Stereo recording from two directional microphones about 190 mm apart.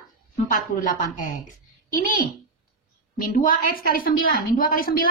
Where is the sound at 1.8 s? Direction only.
45° left (ahead or behind).